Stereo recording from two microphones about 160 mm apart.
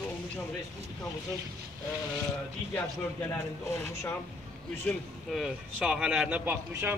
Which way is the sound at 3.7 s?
15° left (ahead or behind).